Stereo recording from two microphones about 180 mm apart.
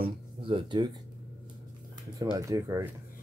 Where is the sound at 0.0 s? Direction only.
30° right (ahead or behind).